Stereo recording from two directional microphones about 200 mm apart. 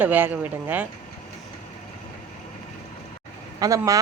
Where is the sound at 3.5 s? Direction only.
15° right (ahead or behind).